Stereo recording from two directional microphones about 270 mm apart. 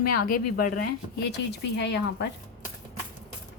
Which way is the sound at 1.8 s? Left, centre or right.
Left.